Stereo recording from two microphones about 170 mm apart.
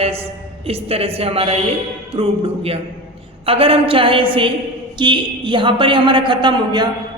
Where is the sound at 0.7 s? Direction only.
35° right (ahead or behind).